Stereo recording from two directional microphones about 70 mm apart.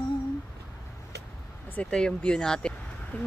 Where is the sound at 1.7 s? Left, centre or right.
Centre.